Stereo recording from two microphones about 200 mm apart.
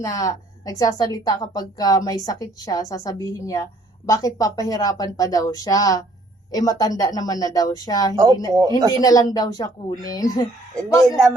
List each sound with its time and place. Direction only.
0.0 s a woman's voice: 15° left (ahead or behind)
8.1 s speech: 15° right (ahead or behind)
8.9 s a woman's voice: 20° left (ahead or behind)